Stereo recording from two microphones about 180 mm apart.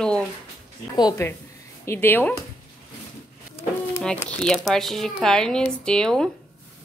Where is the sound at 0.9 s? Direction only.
20° left (ahead or behind).